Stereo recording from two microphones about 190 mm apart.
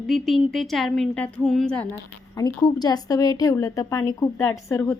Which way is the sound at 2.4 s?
20° left (ahead or behind).